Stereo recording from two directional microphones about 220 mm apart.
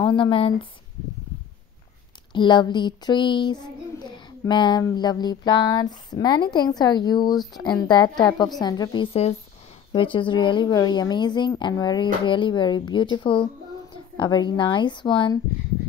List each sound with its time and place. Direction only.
0.0 s speech: 25° left (ahead or behind)
2.3 s speech: 20° left (ahead or behind)